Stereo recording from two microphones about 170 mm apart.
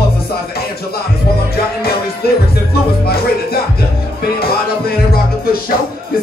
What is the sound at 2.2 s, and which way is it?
Music, 65° left (ahead or behind).